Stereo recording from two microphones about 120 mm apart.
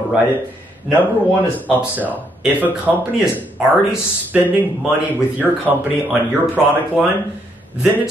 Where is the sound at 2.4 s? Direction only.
15° right (ahead or behind).